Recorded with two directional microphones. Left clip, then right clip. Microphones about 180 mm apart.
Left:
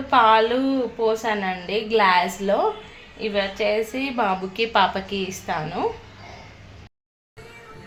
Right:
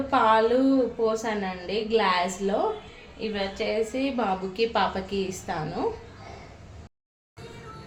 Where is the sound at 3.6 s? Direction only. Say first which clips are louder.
Left 4 dB; 20° left (ahead or behind).